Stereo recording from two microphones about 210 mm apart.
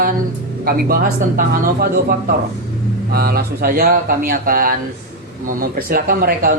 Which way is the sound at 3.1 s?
45° right (ahead or behind).